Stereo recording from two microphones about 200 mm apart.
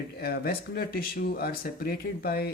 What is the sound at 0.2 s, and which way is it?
Speech, 50° left (ahead or behind).